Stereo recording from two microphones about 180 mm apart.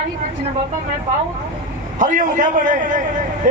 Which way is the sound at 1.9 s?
45° right (ahead or behind).